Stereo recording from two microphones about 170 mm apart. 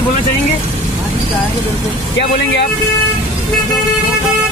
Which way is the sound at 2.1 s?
90° left.